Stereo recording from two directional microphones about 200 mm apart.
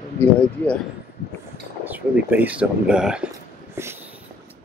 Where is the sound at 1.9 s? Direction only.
10° right (ahead or behind).